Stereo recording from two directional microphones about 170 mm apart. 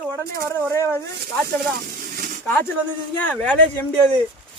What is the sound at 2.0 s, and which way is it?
Snake, 55° right (ahead or behind).